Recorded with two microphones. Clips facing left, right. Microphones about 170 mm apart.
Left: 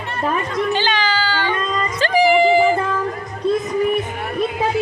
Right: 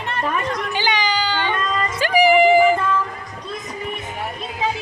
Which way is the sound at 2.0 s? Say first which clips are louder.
Even; 10° right (ahead or behind).